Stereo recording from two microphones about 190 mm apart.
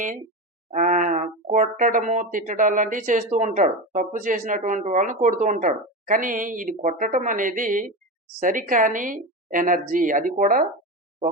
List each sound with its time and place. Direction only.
0.7 s speech: 40° right (ahead or behind)